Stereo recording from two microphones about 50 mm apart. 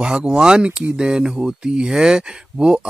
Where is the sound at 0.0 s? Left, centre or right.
Centre.